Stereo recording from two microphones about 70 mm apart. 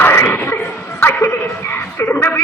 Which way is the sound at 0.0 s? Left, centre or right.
Left.